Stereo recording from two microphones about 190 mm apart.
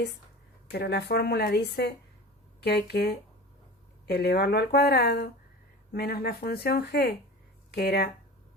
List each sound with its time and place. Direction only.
0.7 s speech: 60° left (ahead or behind)